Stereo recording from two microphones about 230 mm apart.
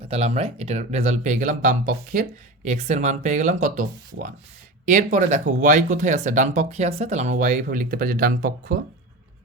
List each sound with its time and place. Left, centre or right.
0.1 s speech: right